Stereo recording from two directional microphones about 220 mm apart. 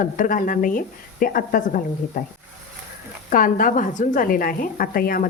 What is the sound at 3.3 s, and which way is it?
Speech, 35° left (ahead or behind).